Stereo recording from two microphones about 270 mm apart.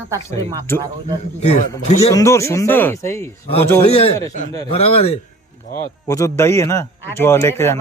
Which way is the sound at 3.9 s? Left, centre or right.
Left.